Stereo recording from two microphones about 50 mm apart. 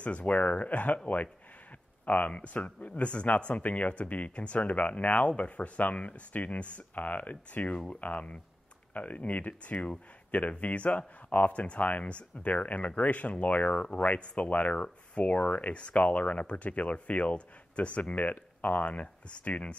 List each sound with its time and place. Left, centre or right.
0.0 s speech: left